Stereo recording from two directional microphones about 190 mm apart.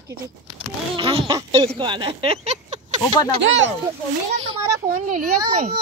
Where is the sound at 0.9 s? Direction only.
25° right (ahead or behind).